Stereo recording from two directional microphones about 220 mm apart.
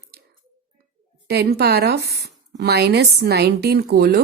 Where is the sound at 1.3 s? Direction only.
45° right (ahead or behind).